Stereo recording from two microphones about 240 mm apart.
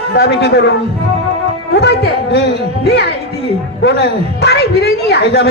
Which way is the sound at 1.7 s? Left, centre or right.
Left.